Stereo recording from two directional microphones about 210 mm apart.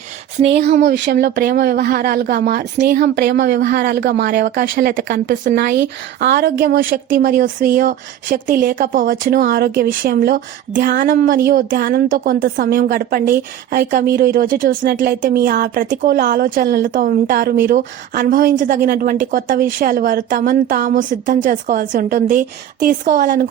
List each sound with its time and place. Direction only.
0.4 s a woman's voice: 50° right (ahead or behind)